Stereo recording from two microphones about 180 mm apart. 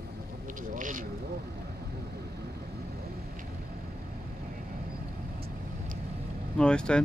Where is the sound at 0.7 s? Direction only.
45° right (ahead or behind).